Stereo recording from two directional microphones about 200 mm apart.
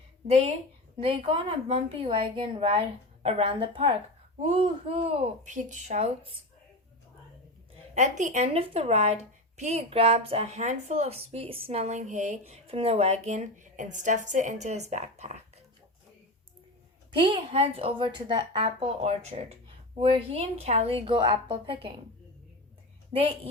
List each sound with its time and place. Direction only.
0.3 s a woman's voice: 30° right (ahead or behind)
7.9 s speech: 35° right (ahead or behind)
17.1 s a woman's voice: 25° right (ahead or behind)
23.1 s a woman's voice: 25° right (ahead or behind)